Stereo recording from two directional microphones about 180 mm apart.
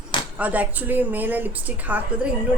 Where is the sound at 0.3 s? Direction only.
10° right (ahead or behind).